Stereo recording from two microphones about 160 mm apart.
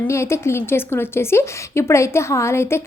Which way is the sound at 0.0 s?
15° left (ahead or behind).